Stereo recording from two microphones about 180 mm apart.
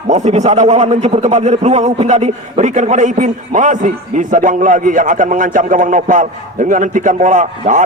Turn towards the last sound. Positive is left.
turn(degrees=-45)  # may be behind; listen again after turning